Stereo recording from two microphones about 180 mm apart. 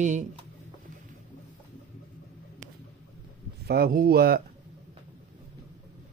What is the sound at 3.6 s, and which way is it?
Speech, 60° right (ahead or behind).